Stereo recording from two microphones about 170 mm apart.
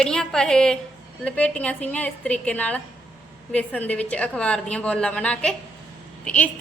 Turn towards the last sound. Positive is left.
turn(degrees=5)  # may be behind; listen again after turning